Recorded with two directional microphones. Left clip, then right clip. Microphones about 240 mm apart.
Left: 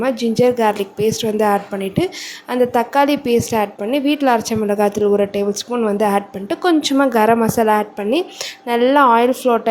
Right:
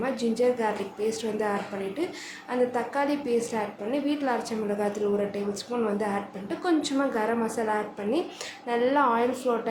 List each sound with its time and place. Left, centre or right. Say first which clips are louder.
0.0 s a woman's voice: left 10 dB; left